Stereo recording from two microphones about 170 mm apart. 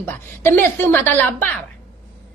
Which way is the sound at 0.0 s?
10° left (ahead or behind).